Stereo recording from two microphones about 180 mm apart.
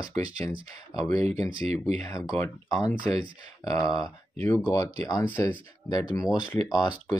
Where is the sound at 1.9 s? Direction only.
15° left (ahead or behind).